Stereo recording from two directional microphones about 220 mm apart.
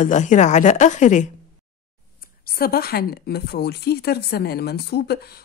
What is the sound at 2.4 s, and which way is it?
Speech, 40° left (ahead or behind).